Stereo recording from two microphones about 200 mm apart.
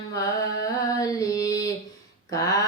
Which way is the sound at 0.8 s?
15° left (ahead or behind).